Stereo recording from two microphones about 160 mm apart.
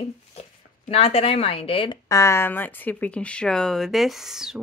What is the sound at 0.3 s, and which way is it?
Speech, 40° left (ahead or behind).